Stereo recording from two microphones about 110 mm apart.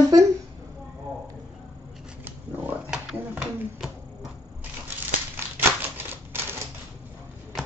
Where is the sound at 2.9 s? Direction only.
5° right (ahead or behind).